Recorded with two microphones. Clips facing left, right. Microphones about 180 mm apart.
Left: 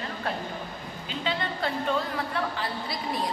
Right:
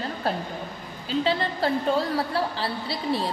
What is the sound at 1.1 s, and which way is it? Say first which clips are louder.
A woman's voice: right 7 dB; 35° right (ahead or behind).